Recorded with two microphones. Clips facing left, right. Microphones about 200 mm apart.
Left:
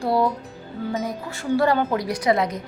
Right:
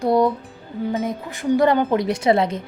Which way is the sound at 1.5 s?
20° right (ahead or behind).